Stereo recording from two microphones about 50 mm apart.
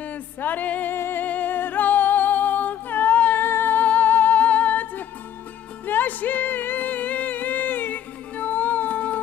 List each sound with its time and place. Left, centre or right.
0.0 s music: left
0.9 s music: left
1.2 s music: left
3.4 s music: left
3.8 s music: left